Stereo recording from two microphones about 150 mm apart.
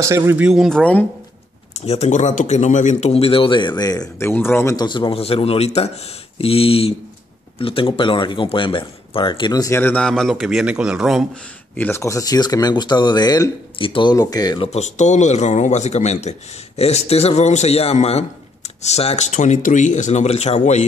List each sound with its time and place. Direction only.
0.0 s speech: 20° right (ahead or behind)
0.5 s a man's voice: centre (ahead or behind)
1.9 s speech: 50° left (ahead or behind); by 9.8 s 25° left (ahead or behind)
9.8 s a man's voice: 10° left (ahead or behind)
11.7 s speech: 15° left (ahead or behind)
14.7 s speech: 50° left (ahead or behind)